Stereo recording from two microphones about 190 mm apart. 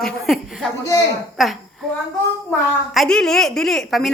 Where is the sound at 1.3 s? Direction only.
Centre (ahead or behind).